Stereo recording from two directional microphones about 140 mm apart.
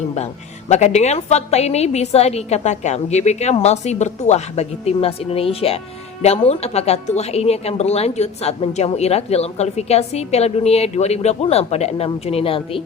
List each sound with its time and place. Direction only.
0.7 s speech: 55° left (ahead or behind)